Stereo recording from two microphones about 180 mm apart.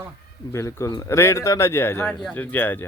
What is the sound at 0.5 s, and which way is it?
Speech, 15° left (ahead or behind).